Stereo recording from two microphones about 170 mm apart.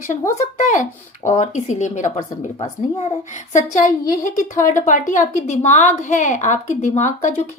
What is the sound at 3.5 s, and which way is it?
A woman's voice, 45° left (ahead or behind).